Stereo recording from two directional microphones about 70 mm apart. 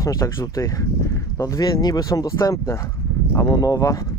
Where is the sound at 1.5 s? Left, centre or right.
Left.